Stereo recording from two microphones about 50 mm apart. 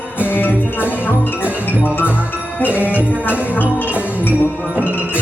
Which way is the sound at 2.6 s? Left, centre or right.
Left.